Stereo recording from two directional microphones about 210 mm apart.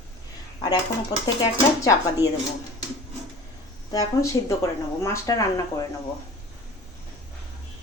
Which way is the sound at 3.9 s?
15° left (ahead or behind).